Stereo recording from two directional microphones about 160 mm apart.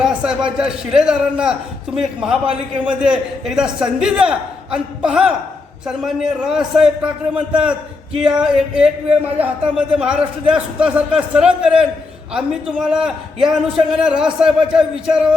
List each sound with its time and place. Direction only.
0.0 s a man's voice: 5° right (ahead or behind)